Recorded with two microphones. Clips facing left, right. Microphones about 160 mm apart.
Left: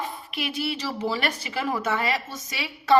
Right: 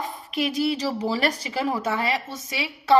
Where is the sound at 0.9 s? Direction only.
15° right (ahead or behind).